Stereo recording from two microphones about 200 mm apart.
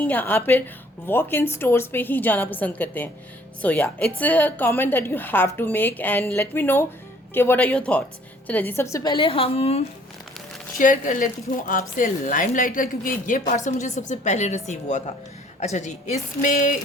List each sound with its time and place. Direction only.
0.0 s a woman's voice: 10° left (ahead or behind); by 9.8 s 30° left (ahead or behind)
10.8 s a woman's voice: 40° left (ahead or behind)